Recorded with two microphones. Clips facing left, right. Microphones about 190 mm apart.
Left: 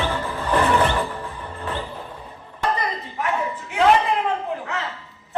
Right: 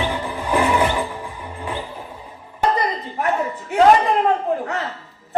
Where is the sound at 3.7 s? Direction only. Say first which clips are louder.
Right 4 dB; 40° right (ahead or behind).